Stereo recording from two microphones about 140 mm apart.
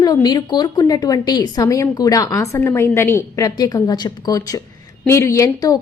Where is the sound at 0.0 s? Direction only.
30° left (ahead or behind).